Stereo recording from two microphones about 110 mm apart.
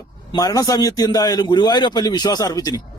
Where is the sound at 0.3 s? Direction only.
35° left (ahead or behind).